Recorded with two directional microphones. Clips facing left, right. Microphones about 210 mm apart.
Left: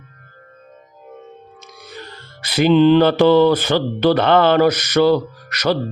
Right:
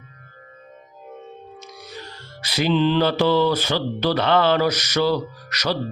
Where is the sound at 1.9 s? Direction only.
55° left (ahead or behind).